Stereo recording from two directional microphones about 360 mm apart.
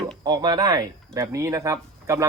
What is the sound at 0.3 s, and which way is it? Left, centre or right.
Speech, centre.